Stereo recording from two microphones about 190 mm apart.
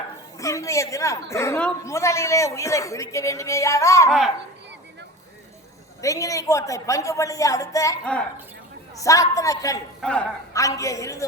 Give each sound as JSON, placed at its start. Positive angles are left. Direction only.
{"t": 0.3, "sound": "a man's voice", "side_deg": 15}
{"t": 6.0, "sound": "a man's voice", "side_deg": 15}
{"t": 8.0, "sound": "a man's voice", "side_deg": 5}
{"t": 9.0, "sound": "a man's voice", "side_deg": 15}
{"t": 10.0, "sound": "a man's voice", "side_deg": 5}
{"t": 10.5, "sound": "a man's voice", "side_deg": 15}